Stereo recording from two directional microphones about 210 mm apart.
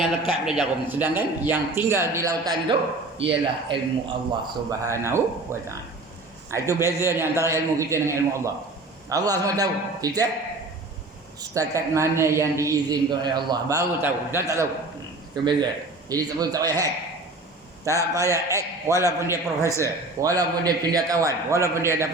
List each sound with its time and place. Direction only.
0.0 s a man's voice: 5° right (ahead or behind); by 4.1 s 25° right (ahead or behind)
4.8 s a man's voice: 15° right (ahead or behind)
11.5 s a man's voice: 15° right (ahead or behind)
17.8 s a man's voice: 15° right (ahead or behind)